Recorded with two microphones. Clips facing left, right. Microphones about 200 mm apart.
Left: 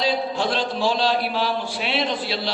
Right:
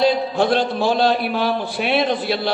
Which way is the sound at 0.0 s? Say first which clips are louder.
Right 6 dB; 55° right (ahead or behind).